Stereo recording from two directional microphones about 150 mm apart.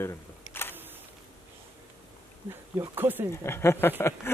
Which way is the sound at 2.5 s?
15° right (ahead or behind).